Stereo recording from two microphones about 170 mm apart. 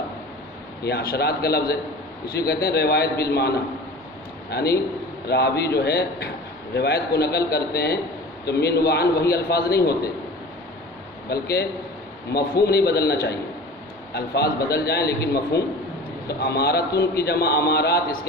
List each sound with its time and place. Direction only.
0.9 s a man's voice: 65° left (ahead or behind)
4.5 s a man's voice: 70° left (ahead or behind)
11.3 s a man's voice: 70° left (ahead or behind)
16.4 s a man's voice: 70° left (ahead or behind)